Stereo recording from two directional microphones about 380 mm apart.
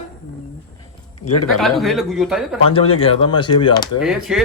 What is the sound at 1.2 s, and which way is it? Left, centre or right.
Speech, left.